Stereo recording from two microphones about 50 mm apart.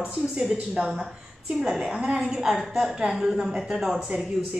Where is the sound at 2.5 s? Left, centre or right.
Centre.